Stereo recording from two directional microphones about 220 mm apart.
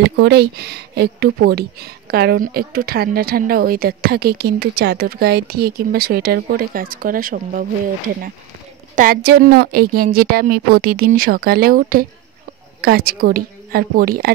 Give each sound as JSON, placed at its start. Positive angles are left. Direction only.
{"t": 0.0, "sound": "speech", "side_deg": -50}
{"t": 8.9, "sound": "a woman's voice", "side_deg": -40}